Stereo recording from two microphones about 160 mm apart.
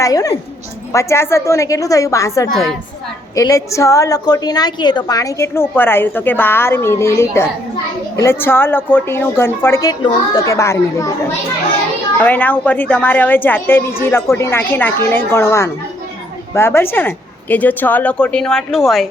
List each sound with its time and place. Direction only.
0.0 s a woman's voice: 20° left (ahead or behind)
12.2 s speech: 10° left (ahead or behind)